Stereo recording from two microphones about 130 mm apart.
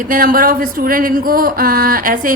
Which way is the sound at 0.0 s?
90° right.